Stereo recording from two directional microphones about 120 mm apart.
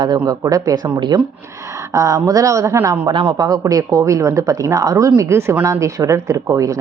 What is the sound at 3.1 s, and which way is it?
Speech, 40° right (ahead or behind).